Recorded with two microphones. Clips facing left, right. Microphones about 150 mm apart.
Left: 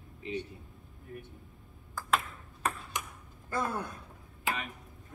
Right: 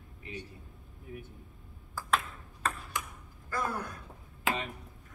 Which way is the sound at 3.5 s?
25° left (ahead or behind).